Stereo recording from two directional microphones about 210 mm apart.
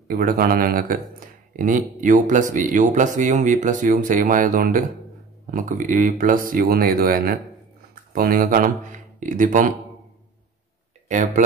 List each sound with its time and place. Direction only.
0.1 s a man's voice: 45° right (ahead or behind)
11.1 s speech: 35° right (ahead or behind)